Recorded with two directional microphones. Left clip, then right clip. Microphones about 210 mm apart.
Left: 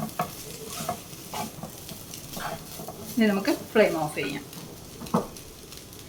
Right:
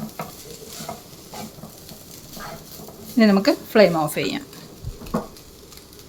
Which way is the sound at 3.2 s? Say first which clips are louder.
Right 7 dB; 55° right (ahead or behind).